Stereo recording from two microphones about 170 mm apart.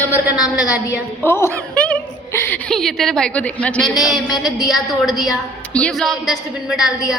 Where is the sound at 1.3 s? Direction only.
15° left (ahead or behind); by 4.2 s centre (ahead or behind).